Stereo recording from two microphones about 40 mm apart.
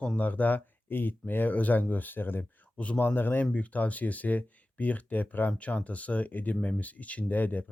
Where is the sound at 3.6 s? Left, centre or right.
Left.